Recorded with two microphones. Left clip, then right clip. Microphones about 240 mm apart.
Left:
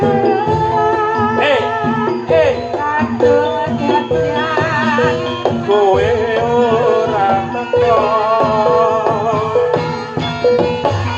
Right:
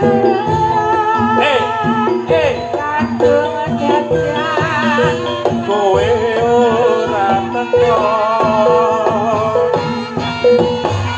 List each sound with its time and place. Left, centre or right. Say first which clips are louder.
0.1 s music: even; right
3.2 s music: even; right
4.9 s music: even; right